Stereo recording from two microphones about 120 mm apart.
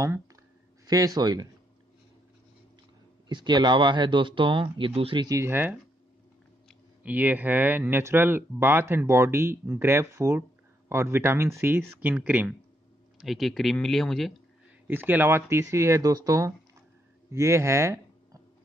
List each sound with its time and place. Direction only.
0.8 s speech: 30° right (ahead or behind)
3.3 s speech: 40° right (ahead or behind)
5.2 s speech: 25° right (ahead or behind)
7.0 s speech: 15° right (ahead or behind); by 14.3 s centre (ahead or behind)
14.9 s speech: 15° right (ahead or behind)